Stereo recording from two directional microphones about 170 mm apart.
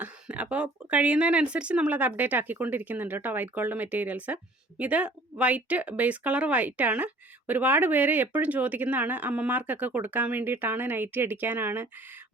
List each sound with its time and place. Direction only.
0.0 s speech: 10° right (ahead or behind)